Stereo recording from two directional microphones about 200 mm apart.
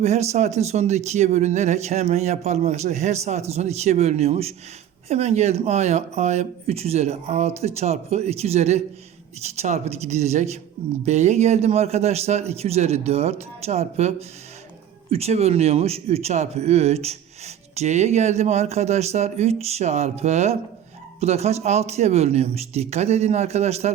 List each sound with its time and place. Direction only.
0.0 s a man's voice: 35° right (ahead or behind)